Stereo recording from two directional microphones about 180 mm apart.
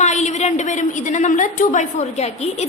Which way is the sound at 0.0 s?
40° left (ahead or behind).